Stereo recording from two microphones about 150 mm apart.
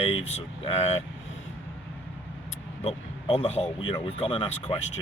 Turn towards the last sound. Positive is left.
turn(degrees=35)  # may be behind; listen again after turning